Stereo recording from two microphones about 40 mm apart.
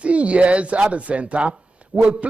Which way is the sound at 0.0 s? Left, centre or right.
Right.